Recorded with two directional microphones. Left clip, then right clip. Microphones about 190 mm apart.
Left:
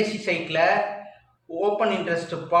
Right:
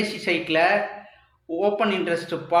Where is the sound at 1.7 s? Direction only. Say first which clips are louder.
Even; 45° right (ahead or behind).